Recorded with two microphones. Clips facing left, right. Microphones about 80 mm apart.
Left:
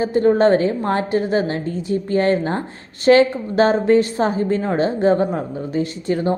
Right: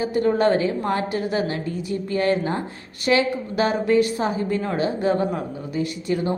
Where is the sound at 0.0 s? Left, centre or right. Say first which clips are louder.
Left 5 dB; left.